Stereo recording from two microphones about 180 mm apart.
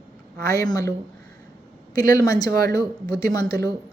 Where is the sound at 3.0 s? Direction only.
60° right (ahead or behind).